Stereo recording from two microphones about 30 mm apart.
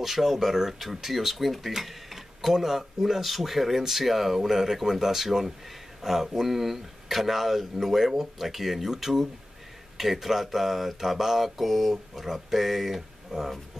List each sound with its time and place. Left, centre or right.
0.0 s speech: centre
13.3 s speech: centre